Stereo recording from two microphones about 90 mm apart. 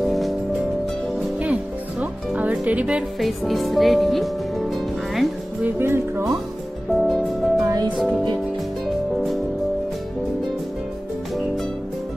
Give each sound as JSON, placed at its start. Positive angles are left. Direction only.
{"t": 0.0, "sound": "music", "side_deg": 0}
{"t": 1.4, "sound": "music", "side_deg": -15}
{"t": 3.2, "sound": "speech", "side_deg": 0}
{"t": 5.8, "sound": "speech", "side_deg": -25}
{"t": 6.9, "sound": "music", "side_deg": 0}
{"t": 9.1, "sound": "music", "side_deg": 0}